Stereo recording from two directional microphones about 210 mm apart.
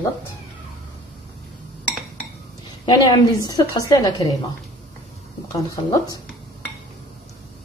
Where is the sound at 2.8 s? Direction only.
20° left (ahead or behind).